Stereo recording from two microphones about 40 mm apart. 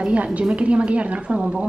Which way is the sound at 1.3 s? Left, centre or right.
Right.